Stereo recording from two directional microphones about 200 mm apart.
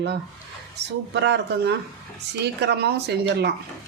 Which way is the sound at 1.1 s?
60° right (ahead or behind).